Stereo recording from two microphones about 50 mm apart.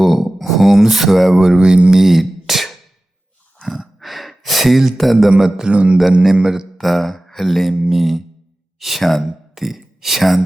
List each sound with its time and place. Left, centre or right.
0.0 s speech: centre
1.4 s speech: centre
3.7 s sigh: centre
4.9 s speech: centre
5.4 s a man's voice: centre
6.7 s a sound: centre
7.9 s speech: centre